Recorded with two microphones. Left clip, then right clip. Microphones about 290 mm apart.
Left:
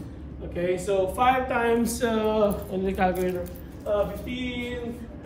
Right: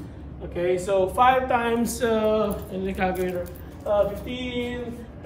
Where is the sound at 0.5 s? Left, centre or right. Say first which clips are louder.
Right 2 dB; centre.